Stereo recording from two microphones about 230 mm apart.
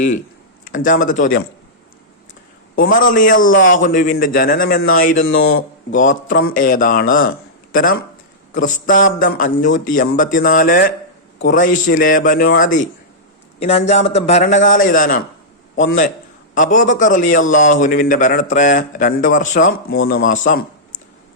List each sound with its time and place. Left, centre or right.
0.6 s speech: left
2.7 s speech: left
13.6 s a man's voice: left